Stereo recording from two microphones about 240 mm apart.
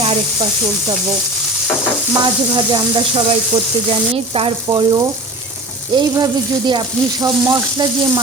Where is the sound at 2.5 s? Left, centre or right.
Centre.